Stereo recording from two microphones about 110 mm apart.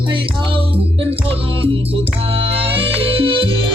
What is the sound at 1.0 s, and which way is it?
Music, 60° right (ahead or behind).